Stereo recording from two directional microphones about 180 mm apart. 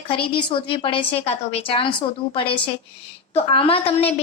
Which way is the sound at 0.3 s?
30° left (ahead or behind).